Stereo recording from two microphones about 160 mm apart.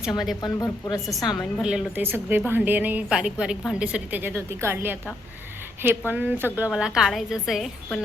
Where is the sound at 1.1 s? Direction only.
Centre (ahead or behind).